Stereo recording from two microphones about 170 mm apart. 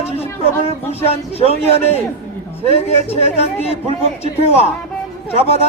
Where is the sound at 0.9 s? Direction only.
35° left (ahead or behind).